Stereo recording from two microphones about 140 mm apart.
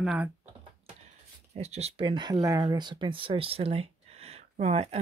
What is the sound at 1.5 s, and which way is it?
Speech, 50° right (ahead or behind).